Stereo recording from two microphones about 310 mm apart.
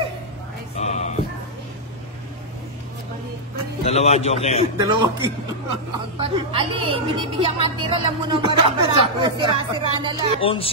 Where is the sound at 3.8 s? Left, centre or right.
Left.